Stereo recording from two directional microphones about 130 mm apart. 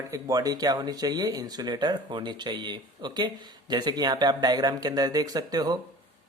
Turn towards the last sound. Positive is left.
turn(degrees=-30)  # may be behind; listen again after turning